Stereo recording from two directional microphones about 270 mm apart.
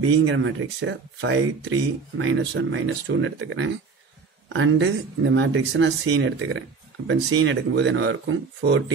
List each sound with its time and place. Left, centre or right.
0.0 s speech: right